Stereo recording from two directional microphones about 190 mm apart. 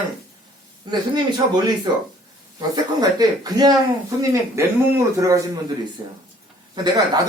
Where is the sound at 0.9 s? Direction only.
20° right (ahead or behind).